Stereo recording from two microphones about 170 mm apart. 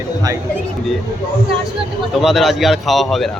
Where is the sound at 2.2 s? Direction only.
Centre (ahead or behind).